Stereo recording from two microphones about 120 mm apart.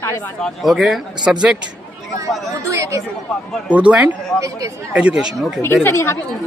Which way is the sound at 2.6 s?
25° right (ahead or behind).